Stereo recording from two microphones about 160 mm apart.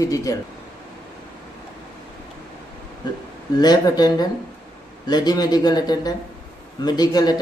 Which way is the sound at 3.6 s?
25° left (ahead or behind).